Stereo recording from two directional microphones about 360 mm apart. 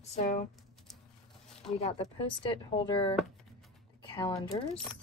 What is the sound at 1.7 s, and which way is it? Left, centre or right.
Speech, centre.